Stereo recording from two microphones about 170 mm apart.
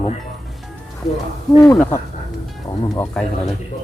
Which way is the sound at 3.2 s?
5° left (ahead or behind).